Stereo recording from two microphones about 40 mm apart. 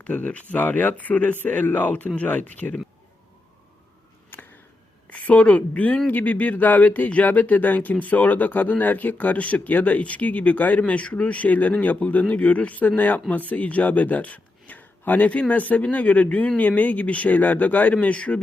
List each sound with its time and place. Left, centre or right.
0.0 s speech: left
4.3 s a sound: left
5.0 s a woman's voice: left
17.9 s speech: left